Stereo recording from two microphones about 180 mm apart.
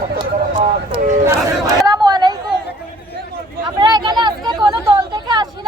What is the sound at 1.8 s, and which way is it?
Chatter, 20° right (ahead or behind).